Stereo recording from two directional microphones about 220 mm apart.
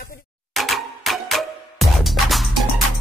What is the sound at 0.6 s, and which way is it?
Music, centre (ahead or behind).